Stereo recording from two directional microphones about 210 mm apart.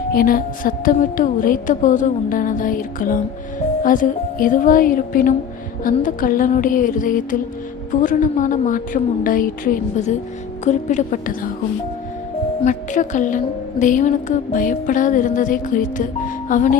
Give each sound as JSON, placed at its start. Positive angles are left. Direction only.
{"t": 0.1, "sound": "a woman's voice", "side_deg": 45}
{"t": 12.6, "sound": "a woman's voice", "side_deg": 35}